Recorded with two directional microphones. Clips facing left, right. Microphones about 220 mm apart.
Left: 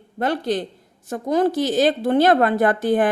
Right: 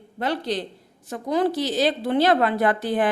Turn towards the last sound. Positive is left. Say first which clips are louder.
# left 4 dB
turn(degrees=45)  # may be behind; listen again after turning